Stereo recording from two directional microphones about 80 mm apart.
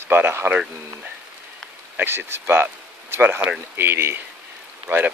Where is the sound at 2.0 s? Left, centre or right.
Right.